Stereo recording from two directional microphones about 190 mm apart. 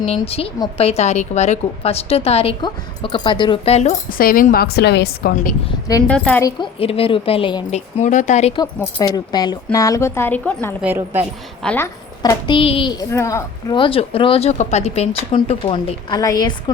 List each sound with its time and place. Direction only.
0.0 s a woman's voice: 30° left (ahead or behind)
4.2 s a woman's voice: 50° left (ahead or behind)
5.3 s a woman's voice: 45° left (ahead or behind)
6.1 s a woman's voice: 5° left (ahead or behind)
6.4 s a woman's voice: 25° left (ahead or behind)
9.0 s a woman's voice: 20° left (ahead or behind)
10.8 s speech: 10° right (ahead or behind)
11.6 s a woman's voice: 5° left (ahead or behind)
12.2 s a woman's voice: 20° left (ahead or behind)